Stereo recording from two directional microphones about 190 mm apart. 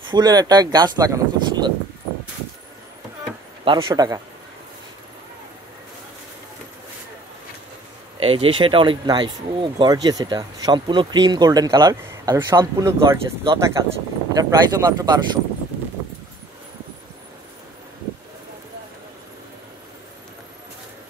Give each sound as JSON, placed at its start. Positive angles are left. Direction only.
{"t": 0.1, "sound": "speech", "side_deg": -20}
{"t": 3.6, "sound": "speech", "side_deg": -25}
{"t": 8.2, "sound": "speech", "side_deg": -30}